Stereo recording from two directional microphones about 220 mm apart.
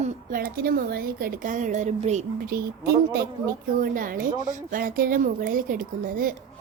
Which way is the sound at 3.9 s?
40° right (ahead or behind).